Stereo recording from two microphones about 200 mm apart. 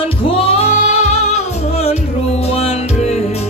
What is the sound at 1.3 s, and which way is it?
Music, 30° left (ahead or behind).